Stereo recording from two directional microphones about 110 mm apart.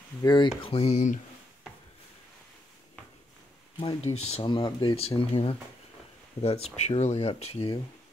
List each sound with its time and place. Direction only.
0.2 s speech: 40° left (ahead or behind)
0.6 s speech: 65° left (ahead or behind); by 1.1 s 80° left
3.8 s speech: 60° left (ahead or behind)
4.5 s speech: 40° left (ahead or behind)
4.9 s speech: 60° left (ahead or behind)